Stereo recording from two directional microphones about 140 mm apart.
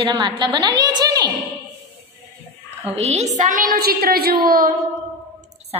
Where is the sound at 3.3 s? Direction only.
75° right (ahead or behind); by 4.7 s 90° right.